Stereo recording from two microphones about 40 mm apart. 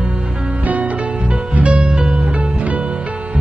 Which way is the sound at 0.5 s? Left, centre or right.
Right.